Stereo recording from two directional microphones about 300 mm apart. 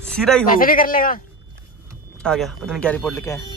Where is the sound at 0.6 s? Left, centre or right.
Left.